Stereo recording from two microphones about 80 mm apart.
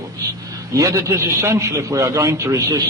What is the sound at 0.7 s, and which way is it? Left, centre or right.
A man's voice, right.